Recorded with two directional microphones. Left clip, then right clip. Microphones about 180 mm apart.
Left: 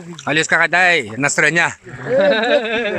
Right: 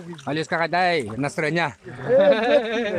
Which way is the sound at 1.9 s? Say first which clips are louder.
Even; 35° left (ahead or behind).